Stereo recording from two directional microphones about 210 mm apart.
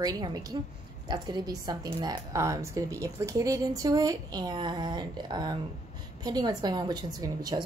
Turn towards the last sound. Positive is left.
turn(degrees=-20)  # may be behind; listen again after turning